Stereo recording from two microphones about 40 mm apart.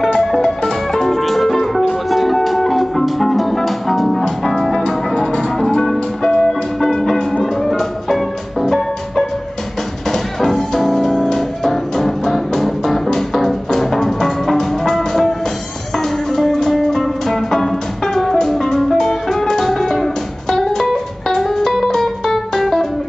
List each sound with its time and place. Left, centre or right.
1.0 s music: centre
5.1 s music: left
5.6 s music: centre